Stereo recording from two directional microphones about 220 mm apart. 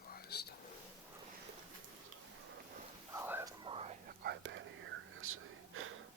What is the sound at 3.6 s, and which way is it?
Whispering, 25° right (ahead or behind).